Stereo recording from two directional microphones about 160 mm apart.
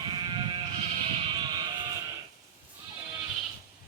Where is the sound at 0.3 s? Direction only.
30° right (ahead or behind).